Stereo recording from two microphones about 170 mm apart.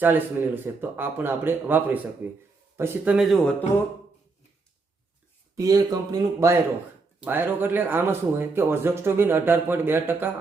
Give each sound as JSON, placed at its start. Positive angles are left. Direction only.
{"t": 0.0, "sound": "speech", "side_deg": -10}
{"t": 5.5, "sound": "speech", "side_deg": -20}